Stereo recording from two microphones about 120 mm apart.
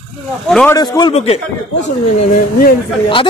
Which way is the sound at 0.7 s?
35° left (ahead or behind).